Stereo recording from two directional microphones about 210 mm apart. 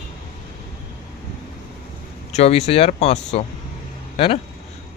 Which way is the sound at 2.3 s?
30° left (ahead or behind).